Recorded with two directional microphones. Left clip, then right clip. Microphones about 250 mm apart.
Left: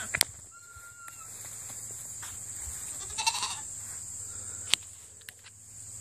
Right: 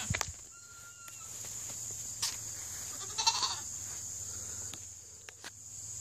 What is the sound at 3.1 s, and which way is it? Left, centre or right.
Goat, left.